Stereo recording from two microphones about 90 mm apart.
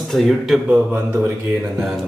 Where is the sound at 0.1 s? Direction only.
Centre (ahead or behind).